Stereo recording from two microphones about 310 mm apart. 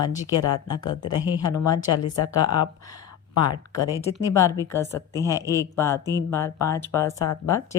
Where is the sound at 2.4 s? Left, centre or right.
Centre.